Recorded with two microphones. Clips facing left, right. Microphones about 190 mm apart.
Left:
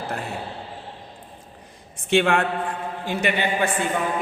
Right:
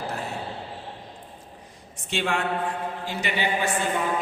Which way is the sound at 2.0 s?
60° left (ahead or behind).